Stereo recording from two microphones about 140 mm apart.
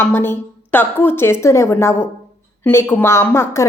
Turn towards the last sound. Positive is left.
turn(degrees=15)  # may be behind; listen again after turning